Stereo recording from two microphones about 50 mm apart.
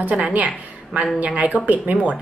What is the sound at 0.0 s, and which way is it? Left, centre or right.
A woman's voice, right.